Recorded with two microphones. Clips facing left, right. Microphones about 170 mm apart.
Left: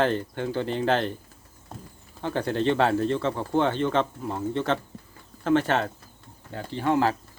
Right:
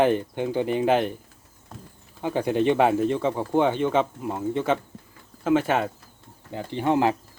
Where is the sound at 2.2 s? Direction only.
10° right (ahead or behind).